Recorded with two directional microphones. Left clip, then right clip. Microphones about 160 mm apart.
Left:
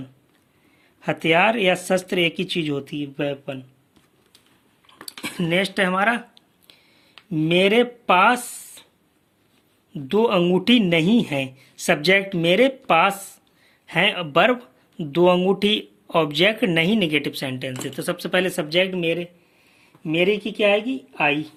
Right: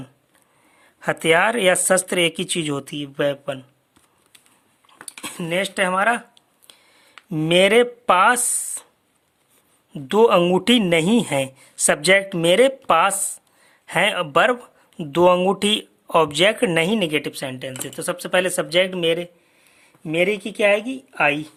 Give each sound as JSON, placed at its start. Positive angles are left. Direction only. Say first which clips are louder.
{"t": 0.9, "sound": "speech", "louder": "right 1 dB", "side_deg": -45}
{"t": 4.9, "sound": "a sound", "louder": "left 2 dB", "side_deg": -20}
{"t": 9.9, "sound": "speech", "louder": "right 4 dB", "side_deg": -55}